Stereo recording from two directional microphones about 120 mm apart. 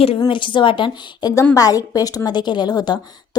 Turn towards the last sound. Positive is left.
turn(degrees=35)  # may be behind; listen again after turning